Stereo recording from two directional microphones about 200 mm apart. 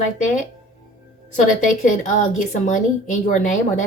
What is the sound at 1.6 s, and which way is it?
A woman's voice, 40° left (ahead or behind).